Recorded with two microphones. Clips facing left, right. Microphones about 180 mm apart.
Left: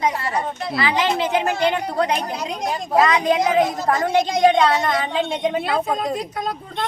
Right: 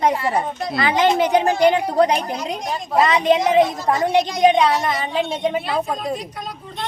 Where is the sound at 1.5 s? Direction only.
15° right (ahead or behind).